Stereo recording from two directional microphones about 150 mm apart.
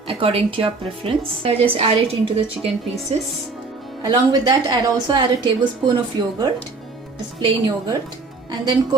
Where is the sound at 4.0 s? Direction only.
25° right (ahead or behind).